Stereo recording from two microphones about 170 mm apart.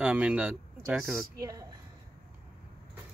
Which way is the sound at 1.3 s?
20° right (ahead or behind).